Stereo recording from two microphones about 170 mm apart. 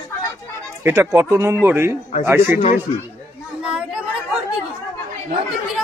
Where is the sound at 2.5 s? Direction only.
45° left (ahead or behind).